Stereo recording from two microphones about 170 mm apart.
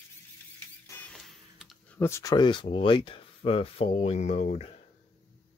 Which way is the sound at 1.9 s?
15° left (ahead or behind).